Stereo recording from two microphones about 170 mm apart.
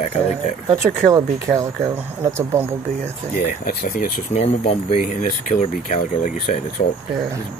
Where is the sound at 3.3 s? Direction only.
55° left (ahead or behind); by 5.0 s 40° left (ahead or behind).